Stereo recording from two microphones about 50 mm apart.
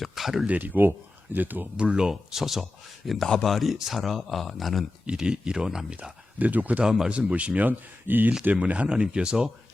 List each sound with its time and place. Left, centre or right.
0.0 s speech: centre
0.4 s speech: right
1.7 s speech: right; by 4.9 s centre
5.0 s speech: centre
6.4 s speech: right
6.8 s speech: centre
7.1 s speech: right
8.4 s speech: right